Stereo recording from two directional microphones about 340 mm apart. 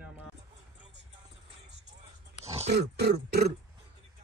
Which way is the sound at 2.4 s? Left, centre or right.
Centre.